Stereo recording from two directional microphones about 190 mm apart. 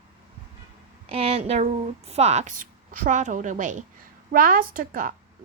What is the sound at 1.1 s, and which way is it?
A woman's voice, 30° right (ahead or behind).